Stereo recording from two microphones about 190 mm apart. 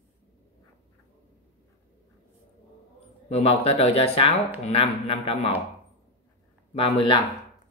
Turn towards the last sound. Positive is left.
turn(degrees=25)  # may be behind; listen again after turning